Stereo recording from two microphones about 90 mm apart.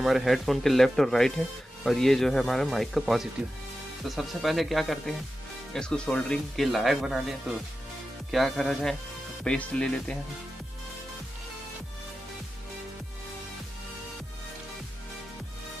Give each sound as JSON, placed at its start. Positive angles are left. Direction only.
{"t": 0.0, "sound": "speech", "side_deg": 0}